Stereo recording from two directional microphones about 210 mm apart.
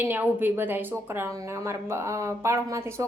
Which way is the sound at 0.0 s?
10° right (ahead or behind).